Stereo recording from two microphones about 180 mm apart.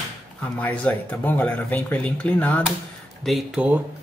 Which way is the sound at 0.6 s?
10° left (ahead or behind).